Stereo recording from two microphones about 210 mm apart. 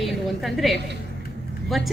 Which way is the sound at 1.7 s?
Centre (ahead or behind).